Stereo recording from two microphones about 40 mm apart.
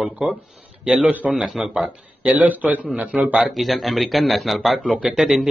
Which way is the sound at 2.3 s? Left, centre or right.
Right.